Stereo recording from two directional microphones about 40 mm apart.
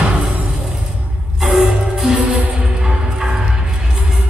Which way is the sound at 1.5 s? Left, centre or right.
Right.